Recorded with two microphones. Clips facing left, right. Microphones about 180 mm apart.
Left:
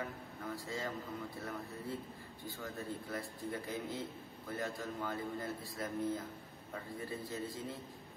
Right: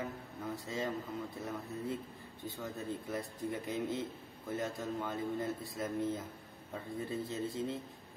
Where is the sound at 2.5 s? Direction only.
20° right (ahead or behind).